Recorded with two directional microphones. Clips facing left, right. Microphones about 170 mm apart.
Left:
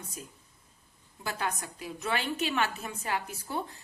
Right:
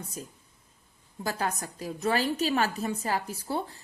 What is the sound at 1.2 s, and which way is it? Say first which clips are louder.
A woman's voice: right 3 dB; 40° right (ahead or behind).